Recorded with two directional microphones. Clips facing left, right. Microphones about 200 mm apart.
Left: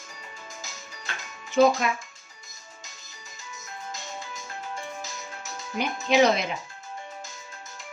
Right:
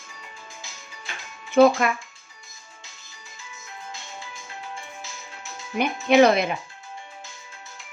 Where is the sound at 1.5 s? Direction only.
60° right (ahead or behind).